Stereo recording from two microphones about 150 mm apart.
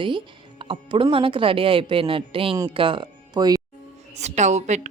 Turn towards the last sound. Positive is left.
turn(degrees=-50)  # may be behind; listen again after turning